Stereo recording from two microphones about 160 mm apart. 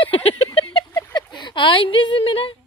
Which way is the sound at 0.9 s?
20° left (ahead or behind).